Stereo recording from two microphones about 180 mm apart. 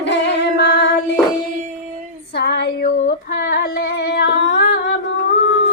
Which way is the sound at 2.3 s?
65° left (ahead or behind).